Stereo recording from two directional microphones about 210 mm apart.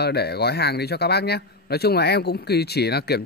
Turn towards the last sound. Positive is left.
turn(degrees=50)  # may be behind; listen again after turning